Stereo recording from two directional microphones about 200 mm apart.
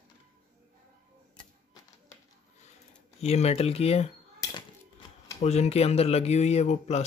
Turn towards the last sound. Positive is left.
turn(degrees=35)  # may be behind; listen again after turning